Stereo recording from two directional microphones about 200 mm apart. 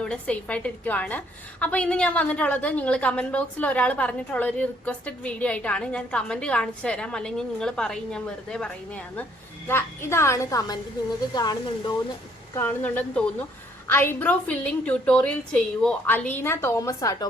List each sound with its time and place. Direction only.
0.0 s a woman's voice: 5° left (ahead or behind)
12.5 s a woman's voice: 10° left (ahead or behind)